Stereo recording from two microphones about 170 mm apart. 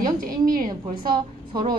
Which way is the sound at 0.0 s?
55° right (ahead or behind).